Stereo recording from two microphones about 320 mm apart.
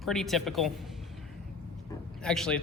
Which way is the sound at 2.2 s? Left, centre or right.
Centre.